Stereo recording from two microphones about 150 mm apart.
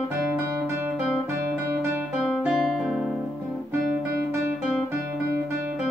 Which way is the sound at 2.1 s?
5° right (ahead or behind).